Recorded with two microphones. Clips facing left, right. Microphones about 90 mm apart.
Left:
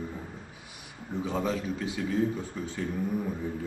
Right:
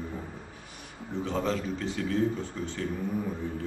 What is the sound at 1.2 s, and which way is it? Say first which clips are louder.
A man's voice: even; 5° left (ahead or behind).